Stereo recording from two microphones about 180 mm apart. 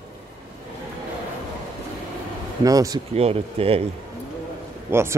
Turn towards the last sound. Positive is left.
turn(degrees=-10)  # may be behind; listen again after turning